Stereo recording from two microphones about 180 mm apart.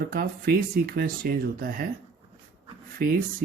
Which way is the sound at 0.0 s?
60° right (ahead or behind).